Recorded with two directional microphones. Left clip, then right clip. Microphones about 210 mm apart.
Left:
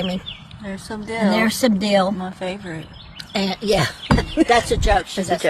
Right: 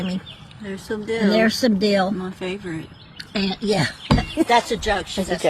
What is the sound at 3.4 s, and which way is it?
Speech, 55° left (ahead or behind).